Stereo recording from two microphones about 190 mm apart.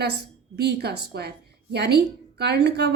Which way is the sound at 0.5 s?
60° right (ahead or behind).